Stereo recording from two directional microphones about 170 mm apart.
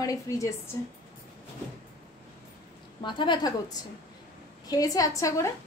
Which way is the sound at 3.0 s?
30° left (ahead or behind).